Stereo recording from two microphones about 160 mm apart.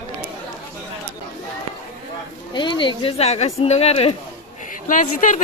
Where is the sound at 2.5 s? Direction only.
30° left (ahead or behind).